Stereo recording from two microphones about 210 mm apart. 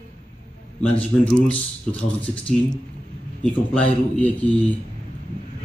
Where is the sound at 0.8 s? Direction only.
5° left (ahead or behind).